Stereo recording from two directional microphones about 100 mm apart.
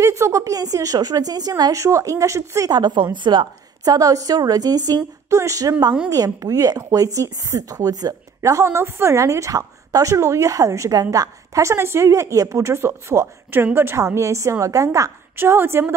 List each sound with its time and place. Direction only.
0.0 s speech: 30° right (ahead or behind)
2.7 s a woman's voice: 50° right (ahead or behind); by 15.9 s 25° right (ahead or behind)